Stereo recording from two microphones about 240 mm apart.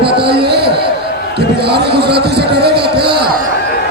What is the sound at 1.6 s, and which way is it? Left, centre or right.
Speech, right.